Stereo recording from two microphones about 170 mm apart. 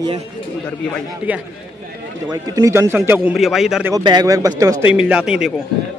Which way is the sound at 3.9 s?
25° right (ahead or behind).